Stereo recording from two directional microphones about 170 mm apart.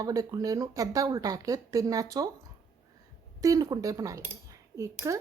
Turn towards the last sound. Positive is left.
turn(degrees=-20)  # may be behind; listen again after turning